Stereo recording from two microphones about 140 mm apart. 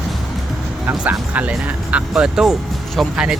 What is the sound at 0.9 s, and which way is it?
Speech, 10° right (ahead or behind).